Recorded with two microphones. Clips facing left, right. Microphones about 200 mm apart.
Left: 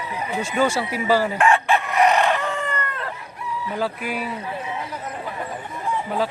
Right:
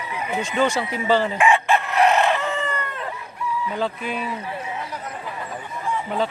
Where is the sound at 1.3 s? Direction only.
10° right (ahead or behind).